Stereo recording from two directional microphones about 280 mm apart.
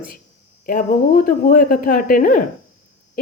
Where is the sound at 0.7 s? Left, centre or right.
Left.